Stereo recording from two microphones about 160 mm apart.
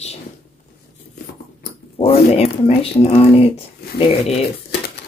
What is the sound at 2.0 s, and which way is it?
Speech, 40° left (ahead or behind).